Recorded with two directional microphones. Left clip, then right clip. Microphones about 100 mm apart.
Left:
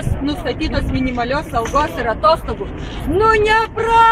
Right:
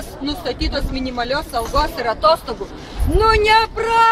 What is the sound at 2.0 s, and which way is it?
Speech, 5° right (ahead or behind).